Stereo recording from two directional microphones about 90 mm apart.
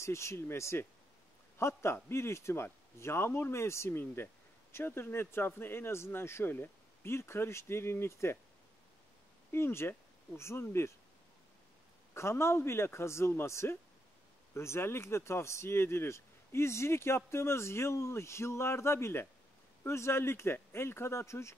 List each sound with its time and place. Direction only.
0.0 s speech: 30° left (ahead or behind)
9.5 s speech: 25° left (ahead or behind)
12.1 s speech: 30° left (ahead or behind)